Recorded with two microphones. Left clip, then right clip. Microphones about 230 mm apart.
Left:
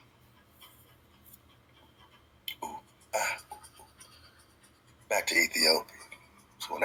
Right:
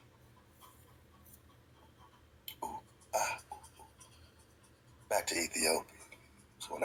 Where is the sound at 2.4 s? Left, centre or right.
Left.